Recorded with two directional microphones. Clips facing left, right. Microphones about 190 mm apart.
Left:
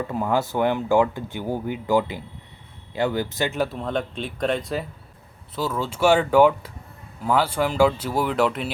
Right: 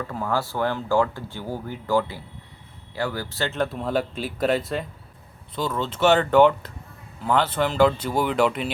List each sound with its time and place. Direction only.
0.0 s speech: 20° left (ahead or behind)
3.7 s speech: 5° right (ahead or behind)